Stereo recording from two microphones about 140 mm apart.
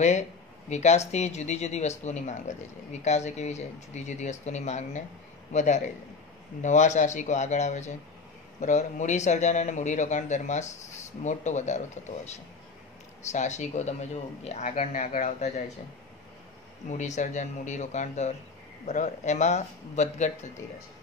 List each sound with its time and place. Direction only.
0.7 s speech: 55° left (ahead or behind)
16.9 s speech: 60° left (ahead or behind)